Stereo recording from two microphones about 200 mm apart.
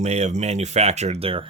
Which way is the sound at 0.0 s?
35° right (ahead or behind).